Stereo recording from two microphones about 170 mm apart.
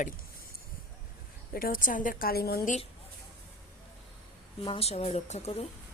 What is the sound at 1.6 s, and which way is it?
A woman's voice, 55° left (ahead or behind).